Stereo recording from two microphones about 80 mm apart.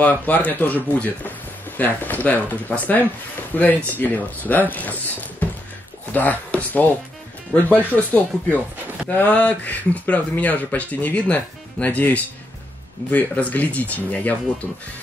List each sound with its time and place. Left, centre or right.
0.0 s speech: left